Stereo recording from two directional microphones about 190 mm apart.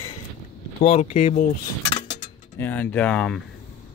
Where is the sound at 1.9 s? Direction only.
35° left (ahead or behind).